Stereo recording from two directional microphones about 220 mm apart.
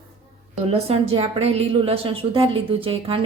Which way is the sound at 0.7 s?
25° right (ahead or behind).